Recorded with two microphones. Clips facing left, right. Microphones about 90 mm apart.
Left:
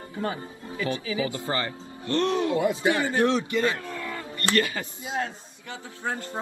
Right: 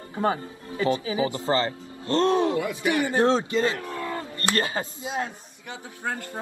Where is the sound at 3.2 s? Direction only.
30° right (ahead or behind).